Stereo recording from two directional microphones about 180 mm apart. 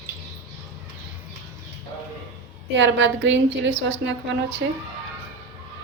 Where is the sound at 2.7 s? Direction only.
85° right.